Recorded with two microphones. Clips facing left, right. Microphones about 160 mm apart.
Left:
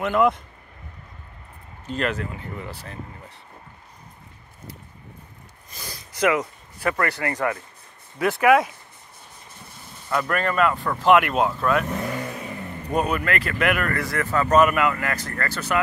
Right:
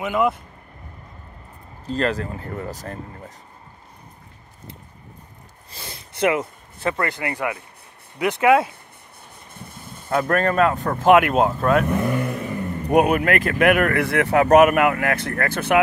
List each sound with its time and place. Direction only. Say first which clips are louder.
0.0 s speech: left 1 dB; 10° right (ahead or behind)
1.9 s speech: right 3 dB; 35° right (ahead or behind)
5.7 s a sound: right 1 dB; 25° right (ahead or behind)
8.2 s speech: right 1 dB; 20° right (ahead or behind)
9.5 s speech: right 6 dB; 50° right (ahead or behind)
12.9 s speech: right 6 dB; 55° right (ahead or behind)